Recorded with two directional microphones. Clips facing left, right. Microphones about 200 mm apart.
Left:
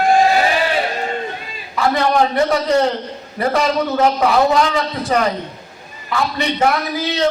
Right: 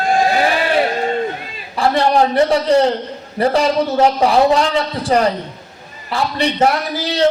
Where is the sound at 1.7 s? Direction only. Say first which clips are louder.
Right 2 dB; 30° right (ahead or behind).